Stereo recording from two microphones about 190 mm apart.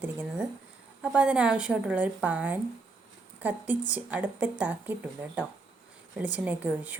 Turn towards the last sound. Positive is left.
turn(degrees=-10)  # may be behind; listen again after turning